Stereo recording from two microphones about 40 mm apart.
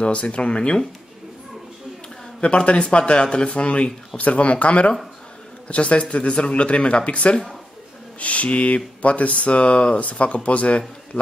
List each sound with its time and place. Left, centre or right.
0.0 s speech: left
2.4 s speech: left